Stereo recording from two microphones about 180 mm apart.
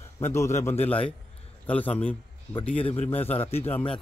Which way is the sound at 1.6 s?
10° left (ahead or behind).